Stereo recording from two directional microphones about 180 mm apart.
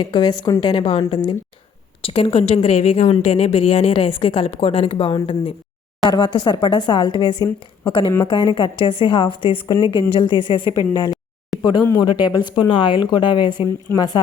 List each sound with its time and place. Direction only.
0.0 s a woman's voice: 25° left (ahead or behind)
11.5 s a sound: centre (ahead or behind)
12.0 s speech: 25° left (ahead or behind)